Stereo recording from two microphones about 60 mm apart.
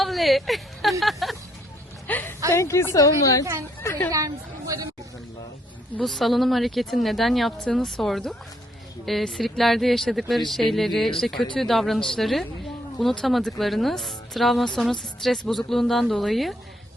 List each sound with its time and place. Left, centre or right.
0.0 s a woman's voice: centre
2.0 s a woman's voice: left
2.5 s a woman's voice: left
4.1 s speech: right
6.0 s a woman's voice: centre